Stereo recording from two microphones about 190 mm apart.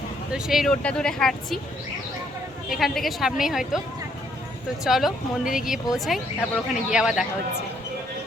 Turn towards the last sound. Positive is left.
turn(degrees=-5)  # may be behind; listen again after turning